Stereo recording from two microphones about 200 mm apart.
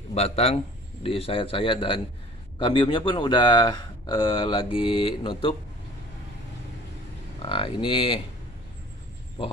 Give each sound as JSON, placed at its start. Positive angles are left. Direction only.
{"t": 0.1, "sound": "a man's voice", "side_deg": 30}
{"t": 7.4, "sound": "speech", "side_deg": 25}